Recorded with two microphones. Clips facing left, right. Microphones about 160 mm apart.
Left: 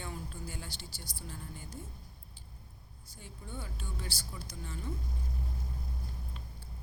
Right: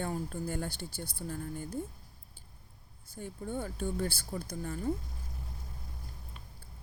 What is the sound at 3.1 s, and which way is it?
Speech, 50° right (ahead or behind).